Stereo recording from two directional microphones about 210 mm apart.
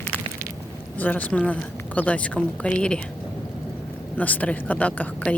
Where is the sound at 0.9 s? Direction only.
10° left (ahead or behind).